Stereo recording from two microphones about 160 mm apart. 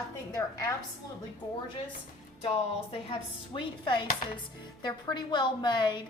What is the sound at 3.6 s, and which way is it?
Chopping, 30° left (ahead or behind).